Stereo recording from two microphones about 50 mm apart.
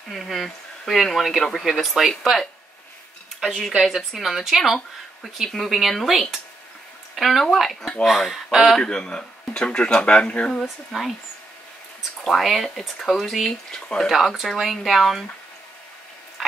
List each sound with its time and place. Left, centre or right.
0.1 s speech: centre
8.8 s speech: centre
10.9 s speech: centre
12.3 s speech: centre
13.7 s speech: centre
14.0 s speech: centre